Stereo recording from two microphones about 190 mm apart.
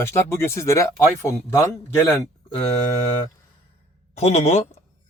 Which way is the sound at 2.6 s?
35° left (ahead or behind).